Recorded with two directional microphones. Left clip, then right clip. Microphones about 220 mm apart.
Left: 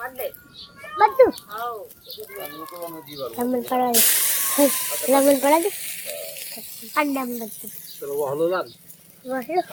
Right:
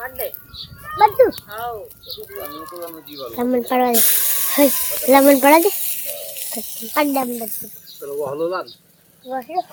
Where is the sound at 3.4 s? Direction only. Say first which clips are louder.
Right 5 dB; 20° right (ahead or behind).